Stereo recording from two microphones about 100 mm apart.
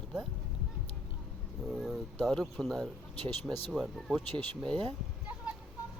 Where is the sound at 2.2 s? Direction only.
5° left (ahead or behind).